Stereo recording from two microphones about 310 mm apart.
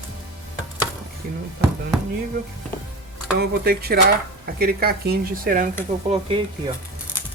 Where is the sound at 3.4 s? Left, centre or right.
Right.